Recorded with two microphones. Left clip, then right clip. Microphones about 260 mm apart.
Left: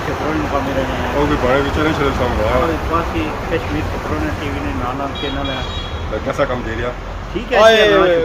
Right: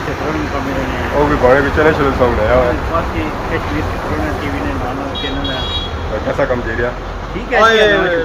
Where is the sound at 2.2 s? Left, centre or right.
Centre.